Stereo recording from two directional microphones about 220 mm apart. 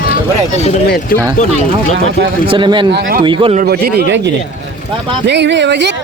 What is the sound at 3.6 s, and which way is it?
Speech, 45° right (ahead or behind).